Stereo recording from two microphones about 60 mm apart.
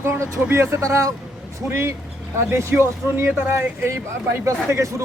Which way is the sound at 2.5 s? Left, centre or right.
Right.